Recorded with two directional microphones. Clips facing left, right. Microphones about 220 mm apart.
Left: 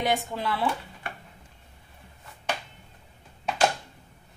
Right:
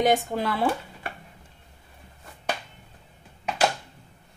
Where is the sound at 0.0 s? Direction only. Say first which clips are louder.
Right 5 dB; 45° right (ahead or behind).